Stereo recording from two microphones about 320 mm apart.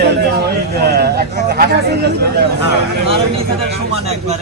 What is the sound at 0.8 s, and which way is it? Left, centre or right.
Speech, right.